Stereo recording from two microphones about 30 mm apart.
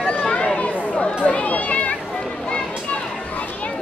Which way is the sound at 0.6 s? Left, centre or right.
Left.